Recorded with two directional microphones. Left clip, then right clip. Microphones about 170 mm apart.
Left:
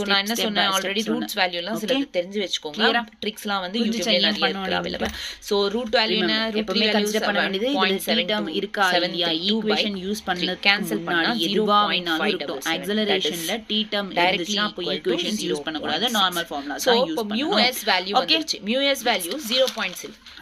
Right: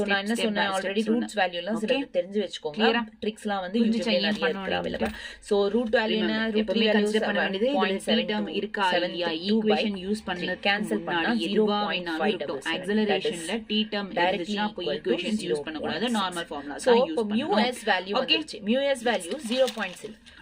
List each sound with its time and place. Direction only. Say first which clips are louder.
0.0 s a woman's voice: left 4 dB; 15° right (ahead or behind)